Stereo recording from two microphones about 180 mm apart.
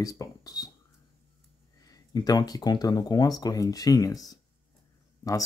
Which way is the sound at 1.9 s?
20° left (ahead or behind).